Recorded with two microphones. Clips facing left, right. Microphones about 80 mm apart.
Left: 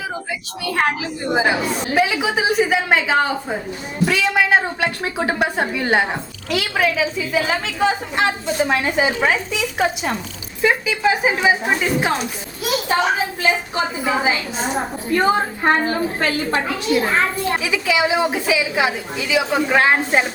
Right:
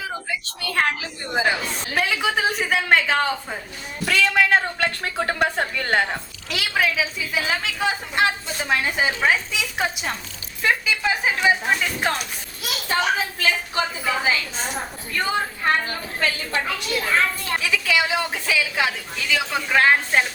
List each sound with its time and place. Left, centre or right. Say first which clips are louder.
0.6 s a woman's voice: left 4 dB; centre
6.5 s a woman's voice: left 4 dB; centre
13.4 s a woman's voice: left 3 dB; left
17.6 s a woman's voice: left 1 dB; centre